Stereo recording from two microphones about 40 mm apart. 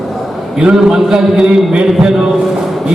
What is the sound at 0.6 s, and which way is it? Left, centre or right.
A man's voice, centre.